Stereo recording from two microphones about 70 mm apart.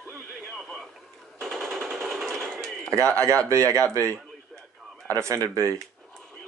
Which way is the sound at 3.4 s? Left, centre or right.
Right.